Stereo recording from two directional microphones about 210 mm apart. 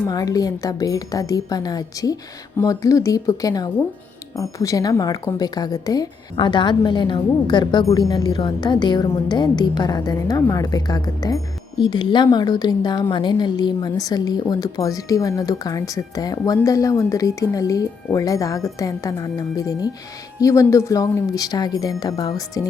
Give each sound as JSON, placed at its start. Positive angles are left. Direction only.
{"t": 0.0, "sound": "a woman's voice", "side_deg": 15}